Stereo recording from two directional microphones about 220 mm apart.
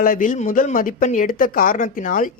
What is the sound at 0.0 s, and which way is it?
Speech, 40° left (ahead or behind).